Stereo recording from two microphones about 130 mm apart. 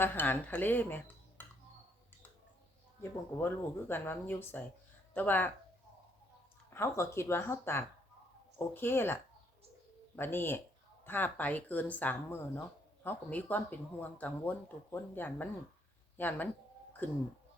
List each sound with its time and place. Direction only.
0.0 s speech: 15° left (ahead or behind)
3.0 s speech: 15° left (ahead or behind)
6.7 s speech: 20° left (ahead or behind)
10.2 s speech: 15° left (ahead or behind)